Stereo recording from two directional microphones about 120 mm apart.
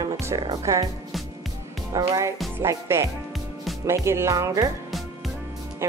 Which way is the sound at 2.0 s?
25° right (ahead or behind).